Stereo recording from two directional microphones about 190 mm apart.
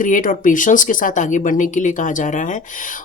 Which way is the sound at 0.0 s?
45° left (ahead or behind).